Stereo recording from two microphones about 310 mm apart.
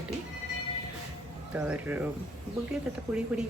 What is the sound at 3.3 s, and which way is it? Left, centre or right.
Speech, centre.